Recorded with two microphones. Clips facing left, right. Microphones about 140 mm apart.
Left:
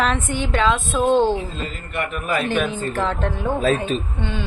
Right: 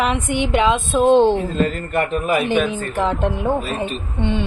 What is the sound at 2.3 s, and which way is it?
A woman's voice, 20° right (ahead or behind).